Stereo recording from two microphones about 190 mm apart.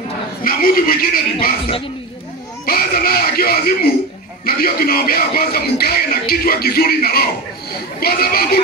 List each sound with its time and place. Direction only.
0.4 s speech: 50° left (ahead or behind)
2.6 s speech: 50° left (ahead or behind)